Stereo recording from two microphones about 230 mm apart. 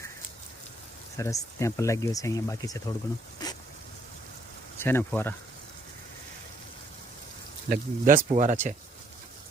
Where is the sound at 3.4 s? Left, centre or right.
Centre.